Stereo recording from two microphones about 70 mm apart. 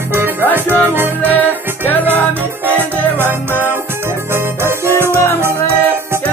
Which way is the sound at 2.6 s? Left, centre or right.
Right.